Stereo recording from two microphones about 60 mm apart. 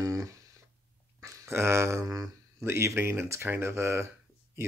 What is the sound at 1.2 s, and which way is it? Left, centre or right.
Speech, right.